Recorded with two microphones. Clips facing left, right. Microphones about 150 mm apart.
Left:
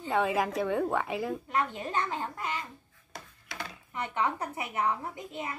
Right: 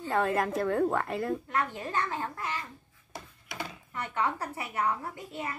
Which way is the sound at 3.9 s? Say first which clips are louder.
Left 1 dB; 15° left (ahead or behind).